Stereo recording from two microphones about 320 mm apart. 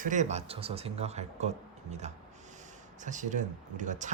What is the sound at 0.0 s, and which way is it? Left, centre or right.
Speech, right.